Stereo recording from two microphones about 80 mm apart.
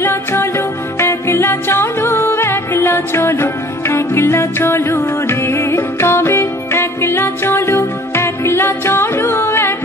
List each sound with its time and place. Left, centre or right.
0.0 s music: left